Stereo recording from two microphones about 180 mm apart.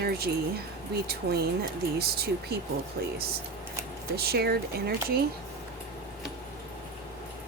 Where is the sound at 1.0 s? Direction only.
60° right (ahead or behind).